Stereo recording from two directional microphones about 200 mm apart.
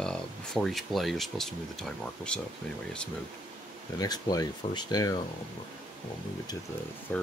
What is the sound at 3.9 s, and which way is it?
Speech, 20° left (ahead or behind).